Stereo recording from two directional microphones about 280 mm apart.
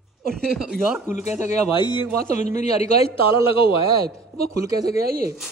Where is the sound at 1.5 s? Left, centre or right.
Centre.